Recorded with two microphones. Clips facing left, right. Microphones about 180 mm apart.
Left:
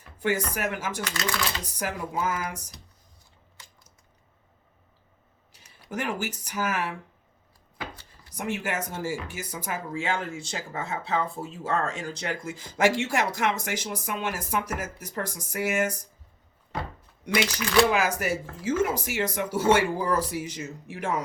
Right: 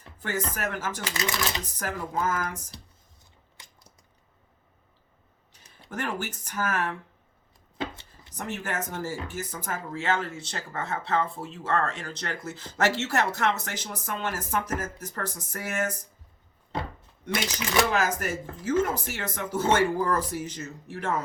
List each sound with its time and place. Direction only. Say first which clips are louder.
0.3 s speech: left 4 dB; 10° left (ahead or behind)
1.0 s speech: right 1 dB; 20° right (ahead or behind)
1.6 s speech: left 1 dB; 10° left (ahead or behind)
5.9 s speech: left 2 dB; 10° left (ahead or behind)
7.8 s chopping: right 5 dB; 25° right (ahead or behind)
8.3 s speech: left 3 dB; 10° left (ahead or behind)
17.9 s speech: left 1 dB; 10° left (ahead or behind)